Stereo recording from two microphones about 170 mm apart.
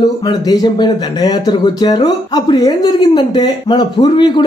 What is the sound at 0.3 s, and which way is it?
Speech, 25° left (ahead or behind).